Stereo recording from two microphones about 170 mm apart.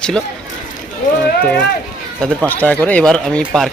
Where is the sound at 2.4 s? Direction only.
10° left (ahead or behind).